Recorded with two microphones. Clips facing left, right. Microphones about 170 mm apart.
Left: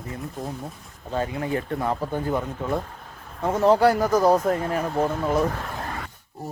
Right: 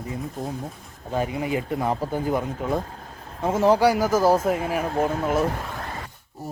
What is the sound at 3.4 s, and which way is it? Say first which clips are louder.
Speech: even; 5° right (ahead or behind).